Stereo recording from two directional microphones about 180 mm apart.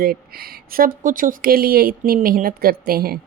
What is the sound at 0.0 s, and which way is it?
A woman's voice, 55° right (ahead or behind).